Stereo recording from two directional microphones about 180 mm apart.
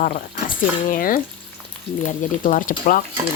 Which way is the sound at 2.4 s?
50° left (ahead or behind).